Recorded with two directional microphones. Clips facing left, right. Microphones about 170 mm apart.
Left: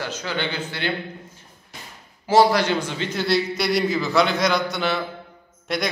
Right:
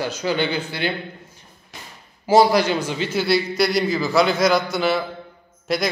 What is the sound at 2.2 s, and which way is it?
A man's voice, 10° right (ahead or behind).